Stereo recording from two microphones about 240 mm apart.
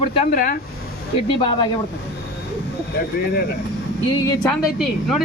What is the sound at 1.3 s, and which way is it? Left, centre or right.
Speech, centre.